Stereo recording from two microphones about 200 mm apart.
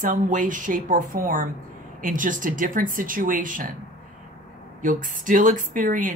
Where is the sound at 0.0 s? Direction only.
40° right (ahead or behind).